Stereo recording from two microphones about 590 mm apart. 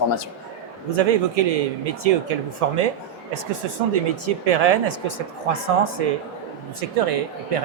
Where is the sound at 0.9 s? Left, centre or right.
Right.